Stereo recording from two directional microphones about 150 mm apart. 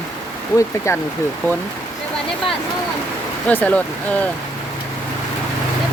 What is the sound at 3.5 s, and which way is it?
Speech, 10° left (ahead or behind).